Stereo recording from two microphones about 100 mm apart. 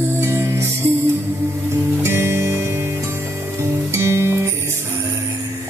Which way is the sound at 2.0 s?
25° right (ahead or behind).